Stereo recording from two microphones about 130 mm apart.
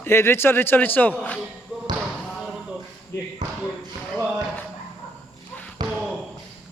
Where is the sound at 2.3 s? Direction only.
Centre (ahead or behind).